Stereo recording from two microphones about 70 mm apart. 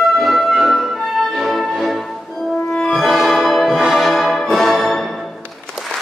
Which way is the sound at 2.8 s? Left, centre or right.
Centre.